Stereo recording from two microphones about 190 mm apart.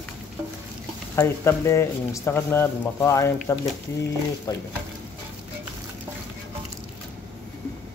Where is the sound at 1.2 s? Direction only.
15° left (ahead or behind).